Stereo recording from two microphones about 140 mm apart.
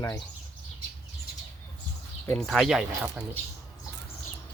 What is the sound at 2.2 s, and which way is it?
Speech, 5° left (ahead or behind).